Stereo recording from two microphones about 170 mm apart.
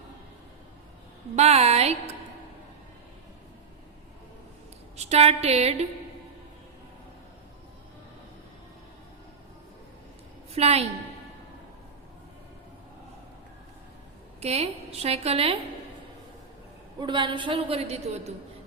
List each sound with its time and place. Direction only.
1.4 s a woman's voice: 40° right (ahead or behind)
4.9 s a woman's voice: 40° right (ahead or behind)
10.5 s a woman's voice: 40° right (ahead or behind)
14.4 s a woman's voice: 40° right (ahead or behind)
17.0 s a woman's voice: 25° right (ahead or behind)